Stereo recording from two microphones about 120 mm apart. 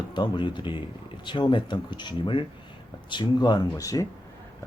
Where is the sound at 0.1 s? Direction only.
40° left (ahead or behind).